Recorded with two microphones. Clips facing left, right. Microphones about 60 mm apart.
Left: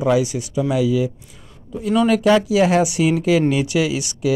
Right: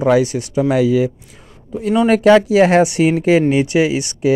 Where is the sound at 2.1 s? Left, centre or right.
Right.